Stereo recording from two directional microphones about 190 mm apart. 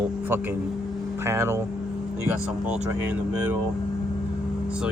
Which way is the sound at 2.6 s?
5° right (ahead or behind).